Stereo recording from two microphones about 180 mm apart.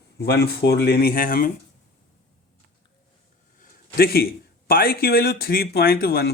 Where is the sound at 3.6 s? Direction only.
55° left (ahead or behind).